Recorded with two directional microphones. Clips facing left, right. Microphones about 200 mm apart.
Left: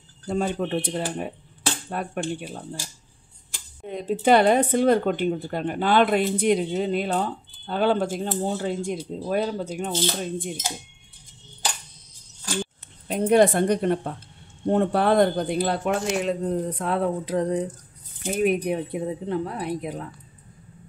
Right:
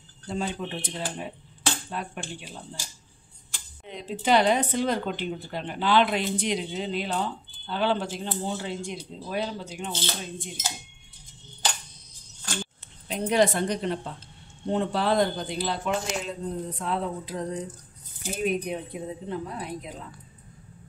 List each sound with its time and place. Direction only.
0.3 s a man's voice: 50° left (ahead or behind)
3.8 s speech: 50° left (ahead or behind)
13.1 s a man's voice: 55° left (ahead or behind)